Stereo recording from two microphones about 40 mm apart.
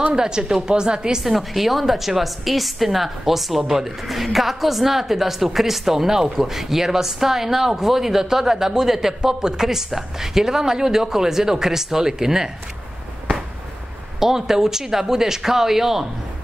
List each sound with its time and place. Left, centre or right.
0.1 s a woman's voice: centre
1.2 s a woman's voice: centre
14.2 s a woman's voice: centre